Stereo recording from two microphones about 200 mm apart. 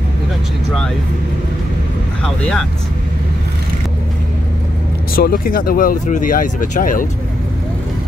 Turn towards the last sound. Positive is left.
turn(degrees=45)  # may be behind; listen again after turning